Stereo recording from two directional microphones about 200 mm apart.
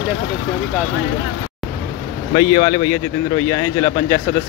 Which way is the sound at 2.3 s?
20° left (ahead or behind).